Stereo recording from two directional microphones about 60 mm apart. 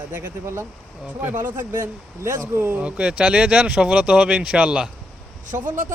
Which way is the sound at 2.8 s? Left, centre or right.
Centre.